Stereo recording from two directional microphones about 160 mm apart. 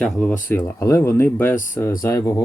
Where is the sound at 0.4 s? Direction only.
15° left (ahead or behind).